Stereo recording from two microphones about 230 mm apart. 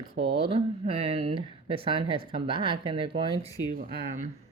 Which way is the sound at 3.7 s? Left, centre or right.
Right.